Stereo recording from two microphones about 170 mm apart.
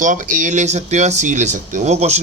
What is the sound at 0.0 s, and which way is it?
Speech, 50° right (ahead or behind).